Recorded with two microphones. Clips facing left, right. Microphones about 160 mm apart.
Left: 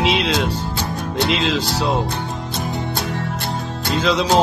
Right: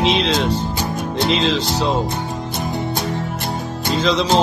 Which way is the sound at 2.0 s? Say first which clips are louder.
Right 1 dB; 20° right (ahead or behind).